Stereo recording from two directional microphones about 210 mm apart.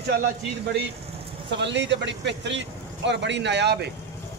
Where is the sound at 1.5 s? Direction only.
55° right (ahead or behind).